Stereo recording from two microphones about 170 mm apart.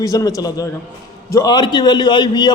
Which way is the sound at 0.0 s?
20° left (ahead or behind).